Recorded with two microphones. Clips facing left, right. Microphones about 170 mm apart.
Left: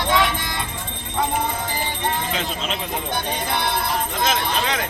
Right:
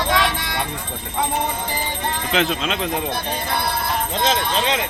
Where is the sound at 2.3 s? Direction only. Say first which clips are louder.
Right 5 dB; 75° right (ahead or behind).